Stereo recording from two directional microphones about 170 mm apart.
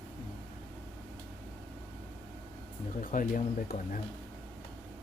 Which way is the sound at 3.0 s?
50° left (ahead or behind).